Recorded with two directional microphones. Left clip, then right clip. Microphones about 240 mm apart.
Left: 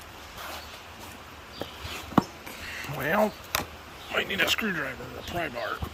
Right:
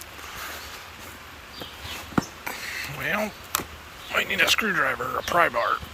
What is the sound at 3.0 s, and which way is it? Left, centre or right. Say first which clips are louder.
Chop: left 3 dB; centre.